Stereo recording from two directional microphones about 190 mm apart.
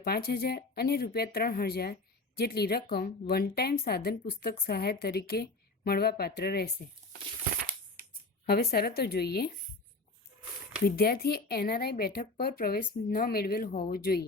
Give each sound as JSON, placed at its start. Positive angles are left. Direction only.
{"t": 0.0, "sound": "speech", "side_deg": 55}
{"t": 8.4, "sound": "speech", "side_deg": 55}
{"t": 10.8, "sound": "speech", "side_deg": 55}